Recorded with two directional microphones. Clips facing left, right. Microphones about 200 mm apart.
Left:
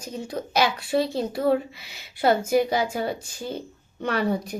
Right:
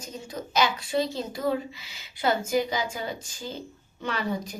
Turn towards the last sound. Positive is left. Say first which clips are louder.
# left 5 dB
turn(degrees=60)  # may be behind; listen again after turning